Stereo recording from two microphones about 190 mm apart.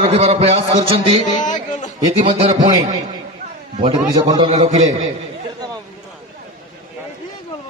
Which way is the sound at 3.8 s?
25° right (ahead or behind).